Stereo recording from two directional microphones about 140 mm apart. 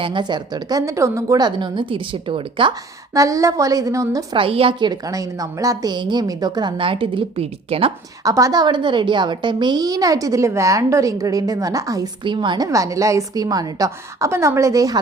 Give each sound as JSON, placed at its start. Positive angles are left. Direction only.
{"t": 0.0, "sound": "a woman's voice", "side_deg": -35}
{"t": 3.2, "sound": "a woman's voice", "side_deg": -25}
{"t": 4.4, "sound": "a woman's voice", "side_deg": -40}
{"t": 8.2, "sound": "a woman's voice", "side_deg": -25}
{"t": 12.2, "sound": "a woman's voice", "side_deg": -35}